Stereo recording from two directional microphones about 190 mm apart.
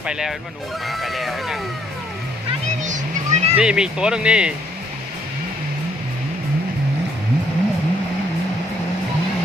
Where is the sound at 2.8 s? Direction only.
40° right (ahead or behind).